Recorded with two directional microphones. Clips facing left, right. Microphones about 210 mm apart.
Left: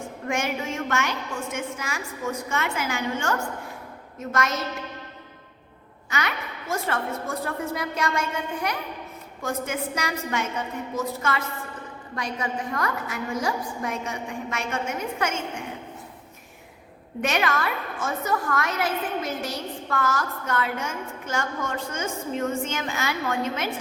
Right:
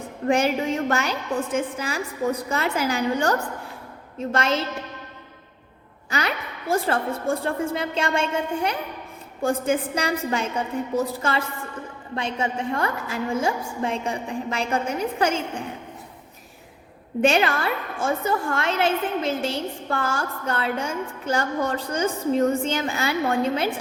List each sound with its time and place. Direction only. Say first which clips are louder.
0.3 s a woman's voice: right 7 dB; 35° right (ahead or behind)
6.1 s a woman's voice: right 3 dB; 35° right (ahead or behind)
17.2 s a woman's voice: right 5 dB; 30° right (ahead or behind)